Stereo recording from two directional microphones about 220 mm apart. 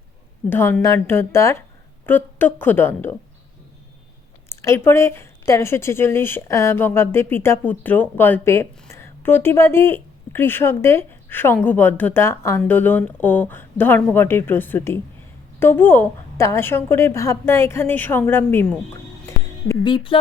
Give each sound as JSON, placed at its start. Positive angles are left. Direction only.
{"t": 0.5, "sound": "a woman's voice", "side_deg": 10}
{"t": 4.4, "sound": "a woman's voice", "side_deg": 10}
{"t": 19.2, "sound": "a sound", "side_deg": 15}